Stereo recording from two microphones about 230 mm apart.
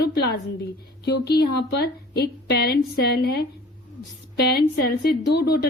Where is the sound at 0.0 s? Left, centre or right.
Left.